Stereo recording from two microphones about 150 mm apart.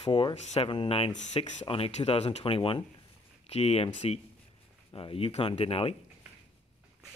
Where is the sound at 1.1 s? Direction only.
50° left (ahead or behind).